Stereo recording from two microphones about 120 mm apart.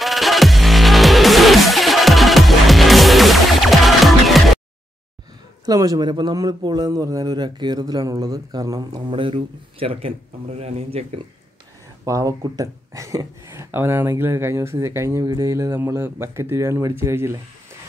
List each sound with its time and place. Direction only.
0.0 s music: centre (ahead or behind)
5.7 s a man's voice: 30° right (ahead or behind)
9.1 s speech: 50° right (ahead or behind)
12.0 s speech: 25° right (ahead or behind)